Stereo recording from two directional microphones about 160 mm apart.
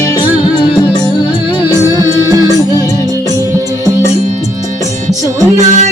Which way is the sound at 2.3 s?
20° right (ahead or behind).